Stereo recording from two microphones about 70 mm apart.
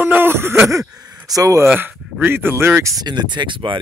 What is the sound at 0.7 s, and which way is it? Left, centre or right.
Speech, right.